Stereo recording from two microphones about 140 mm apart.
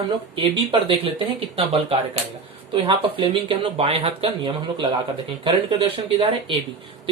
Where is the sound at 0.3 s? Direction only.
40° right (ahead or behind).